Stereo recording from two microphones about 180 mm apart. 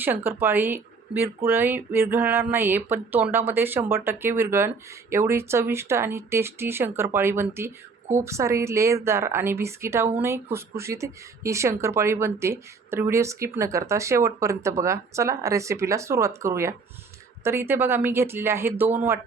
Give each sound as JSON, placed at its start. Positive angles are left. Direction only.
{"t": 0.3, "sound": "speech", "side_deg": -10}